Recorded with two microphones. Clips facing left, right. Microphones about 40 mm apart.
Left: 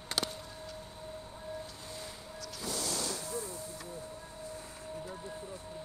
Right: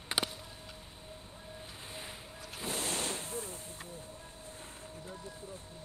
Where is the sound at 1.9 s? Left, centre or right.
Right.